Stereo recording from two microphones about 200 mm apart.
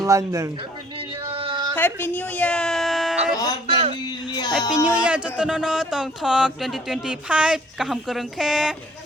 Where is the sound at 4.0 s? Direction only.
20° left (ahead or behind).